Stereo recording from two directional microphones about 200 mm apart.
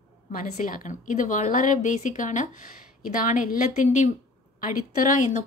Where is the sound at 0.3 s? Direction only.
40° left (ahead or behind).